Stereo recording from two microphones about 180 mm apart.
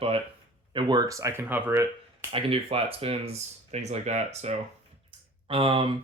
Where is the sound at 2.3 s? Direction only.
30° right (ahead or behind).